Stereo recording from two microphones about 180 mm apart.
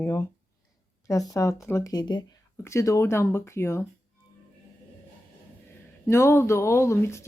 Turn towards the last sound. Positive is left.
turn(degrees=15)  # may be behind; listen again after turning